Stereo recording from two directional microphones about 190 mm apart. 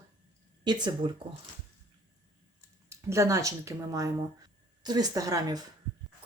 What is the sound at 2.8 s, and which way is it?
Speech, 15° right (ahead or behind).